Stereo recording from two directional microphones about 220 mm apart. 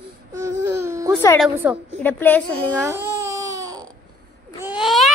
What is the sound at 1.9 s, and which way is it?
Speech, 10° left (ahead or behind).